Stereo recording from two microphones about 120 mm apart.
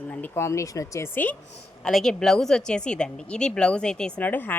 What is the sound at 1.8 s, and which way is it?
Speech, 5° left (ahead or behind).